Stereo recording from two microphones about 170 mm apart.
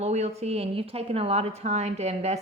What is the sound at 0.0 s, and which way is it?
A woman's voice, 40° right (ahead or behind).